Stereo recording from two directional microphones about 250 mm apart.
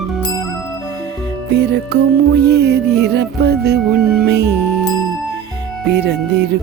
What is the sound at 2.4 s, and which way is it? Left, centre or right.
Music, right.